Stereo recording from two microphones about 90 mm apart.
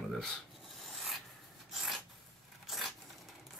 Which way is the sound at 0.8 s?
Centre (ahead or behind).